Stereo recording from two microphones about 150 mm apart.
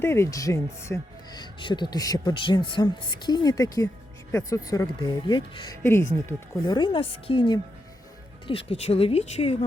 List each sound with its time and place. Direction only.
0.0 s speech: 15° left (ahead or behind); by 9.6 s 45° left (ahead or behind)